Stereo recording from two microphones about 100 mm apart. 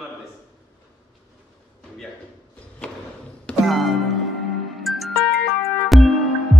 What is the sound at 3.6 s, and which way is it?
Music, centre (ahead or behind).